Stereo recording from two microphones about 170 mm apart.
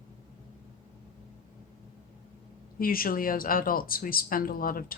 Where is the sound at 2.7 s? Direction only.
60° left (ahead or behind).